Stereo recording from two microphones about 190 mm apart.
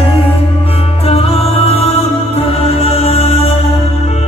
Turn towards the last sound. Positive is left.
turn(degrees=30)  # may be behind; listen again after turning